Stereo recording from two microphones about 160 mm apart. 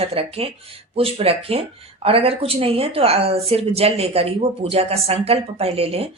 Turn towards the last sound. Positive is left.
turn(degrees=-40)  # may be behind; listen again after turning